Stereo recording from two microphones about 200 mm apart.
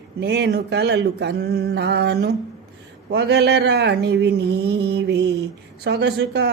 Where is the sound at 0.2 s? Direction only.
55° right (ahead or behind).